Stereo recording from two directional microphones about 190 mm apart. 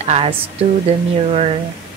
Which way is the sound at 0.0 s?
30° right (ahead or behind).